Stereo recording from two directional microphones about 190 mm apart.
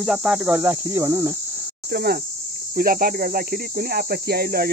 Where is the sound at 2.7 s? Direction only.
50° right (ahead or behind).